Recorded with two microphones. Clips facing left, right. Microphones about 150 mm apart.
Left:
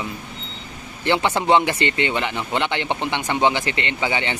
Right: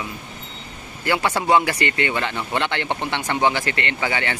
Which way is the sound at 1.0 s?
25° left (ahead or behind).